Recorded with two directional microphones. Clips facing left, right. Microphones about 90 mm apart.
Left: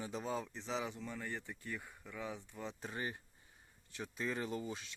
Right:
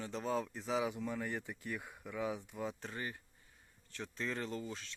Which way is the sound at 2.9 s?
20° left (ahead or behind).